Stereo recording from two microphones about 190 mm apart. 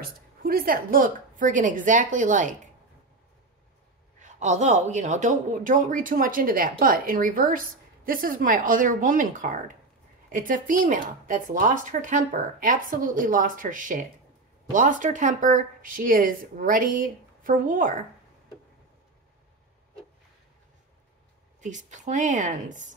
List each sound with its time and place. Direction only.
0.0 s speech: 50° right (ahead or behind)
4.2 s speech: 40° right (ahead or behind)
21.5 s speech: 40° right (ahead or behind)